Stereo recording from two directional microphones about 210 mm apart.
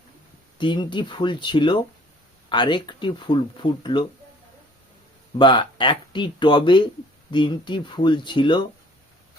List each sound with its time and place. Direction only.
0.6 s speech: 20° left (ahead or behind)
5.4 s speech: 20° left (ahead or behind)